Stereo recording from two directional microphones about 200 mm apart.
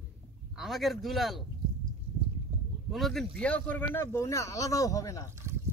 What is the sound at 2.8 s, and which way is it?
Speech, centre (ahead or behind).